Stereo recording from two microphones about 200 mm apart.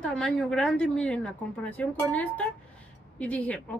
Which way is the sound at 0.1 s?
Centre (ahead or behind).